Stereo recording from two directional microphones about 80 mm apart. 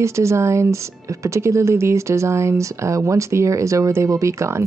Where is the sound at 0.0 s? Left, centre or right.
Right.